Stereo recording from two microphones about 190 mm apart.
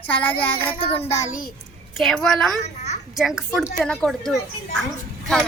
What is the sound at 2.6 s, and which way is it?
Speech, 35° left (ahead or behind).